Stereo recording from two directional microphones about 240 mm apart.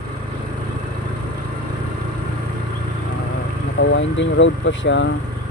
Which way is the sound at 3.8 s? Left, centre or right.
Left.